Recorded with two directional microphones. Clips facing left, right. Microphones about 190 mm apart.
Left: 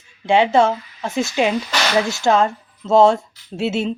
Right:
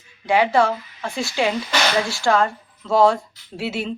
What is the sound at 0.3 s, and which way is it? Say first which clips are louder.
A woman's voice: left 3 dB; 25° left (ahead or behind).